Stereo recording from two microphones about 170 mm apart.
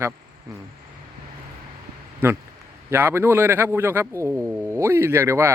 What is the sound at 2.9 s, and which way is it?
Speech, 15° right (ahead or behind).